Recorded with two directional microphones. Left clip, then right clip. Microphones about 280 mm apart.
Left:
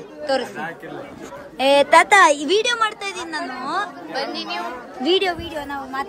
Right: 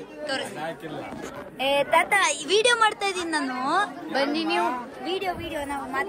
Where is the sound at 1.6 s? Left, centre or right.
Left.